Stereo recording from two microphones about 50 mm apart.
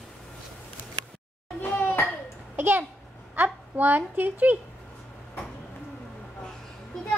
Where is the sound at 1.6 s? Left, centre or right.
Left.